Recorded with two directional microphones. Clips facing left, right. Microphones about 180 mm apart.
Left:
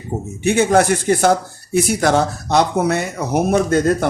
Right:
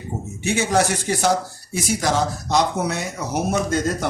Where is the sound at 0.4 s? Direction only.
55° left (ahead or behind).